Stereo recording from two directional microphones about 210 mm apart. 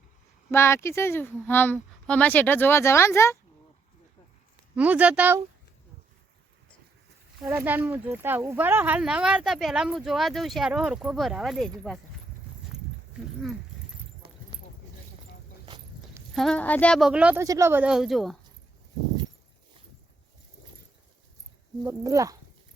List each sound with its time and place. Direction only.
0.5 s speech: 10° left (ahead or behind)
4.7 s speech: 5° right (ahead or behind)
7.4 s speech: 10° right (ahead or behind)
15.6 s a sound: 20° right (ahead or behind)
16.3 s speech: centre (ahead or behind)
21.8 s speech: 15° right (ahead or behind)